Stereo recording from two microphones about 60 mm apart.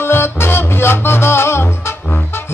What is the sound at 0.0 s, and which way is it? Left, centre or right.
Music, left.